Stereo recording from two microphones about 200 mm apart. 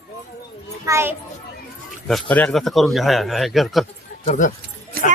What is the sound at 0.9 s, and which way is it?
Speech, 15° right (ahead or behind).